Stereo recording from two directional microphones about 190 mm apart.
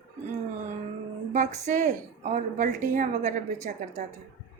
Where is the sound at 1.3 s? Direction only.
40° right (ahead or behind).